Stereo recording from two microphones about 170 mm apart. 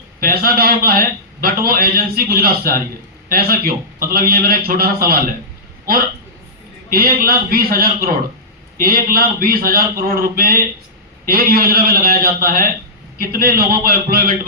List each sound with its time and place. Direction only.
0.2 s a man's voice: 60° right (ahead or behind)
6.9 s a man's voice: 60° right (ahead or behind)